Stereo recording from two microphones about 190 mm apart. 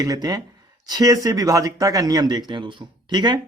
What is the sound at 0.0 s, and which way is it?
Speech, 20° right (ahead or behind).